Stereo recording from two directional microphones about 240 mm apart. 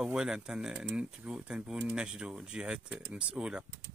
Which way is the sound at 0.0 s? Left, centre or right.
Centre.